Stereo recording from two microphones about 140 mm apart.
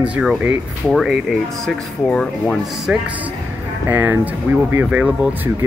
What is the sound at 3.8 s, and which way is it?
Speech, 15° right (ahead or behind).